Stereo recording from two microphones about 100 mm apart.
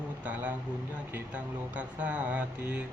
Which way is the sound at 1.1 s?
15° right (ahead or behind).